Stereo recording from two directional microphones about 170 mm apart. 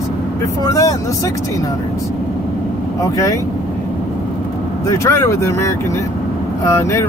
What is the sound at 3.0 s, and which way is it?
Speech, 20° left (ahead or behind).